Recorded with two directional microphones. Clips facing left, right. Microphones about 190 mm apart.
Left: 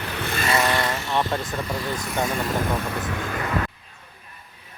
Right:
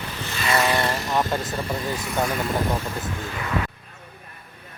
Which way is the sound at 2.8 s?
65° left (ahead or behind).